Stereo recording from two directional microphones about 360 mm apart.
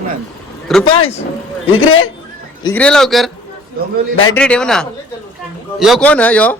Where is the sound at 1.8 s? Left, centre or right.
Left.